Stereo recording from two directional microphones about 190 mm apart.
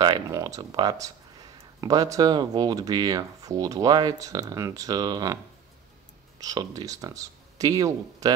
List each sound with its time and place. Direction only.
0.0 s speech: 20° right (ahead or behind)
6.4 s speech: 20° right (ahead or behind)